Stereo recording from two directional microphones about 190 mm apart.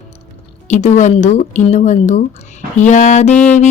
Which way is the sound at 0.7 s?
40° left (ahead or behind).